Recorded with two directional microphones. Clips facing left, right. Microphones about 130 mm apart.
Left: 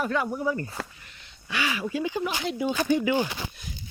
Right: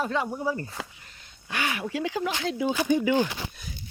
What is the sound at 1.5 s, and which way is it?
Speech, 55° right (ahead or behind).